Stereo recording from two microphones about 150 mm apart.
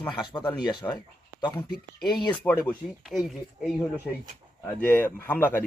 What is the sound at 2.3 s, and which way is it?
Speech, 10° left (ahead or behind).